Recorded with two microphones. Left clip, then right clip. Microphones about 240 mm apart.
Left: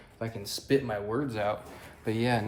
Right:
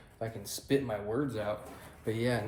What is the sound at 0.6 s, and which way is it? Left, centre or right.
Speech, left.